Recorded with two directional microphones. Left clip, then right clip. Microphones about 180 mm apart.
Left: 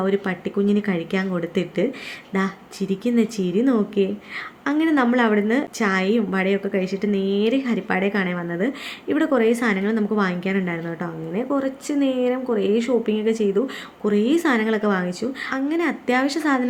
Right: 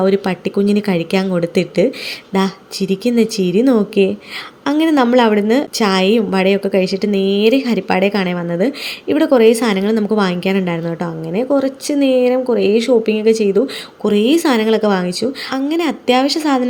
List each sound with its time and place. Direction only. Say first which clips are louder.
0.0 s a woman's voice: right 8 dB; 25° right (ahead or behind)